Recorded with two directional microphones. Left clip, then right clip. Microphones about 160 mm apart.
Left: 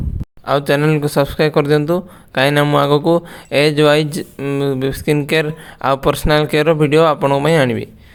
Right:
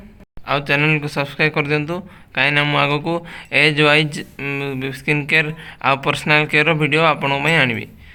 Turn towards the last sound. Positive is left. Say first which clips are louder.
# left 2 dB
turn(degrees=40)  # may be behind; listen again after turning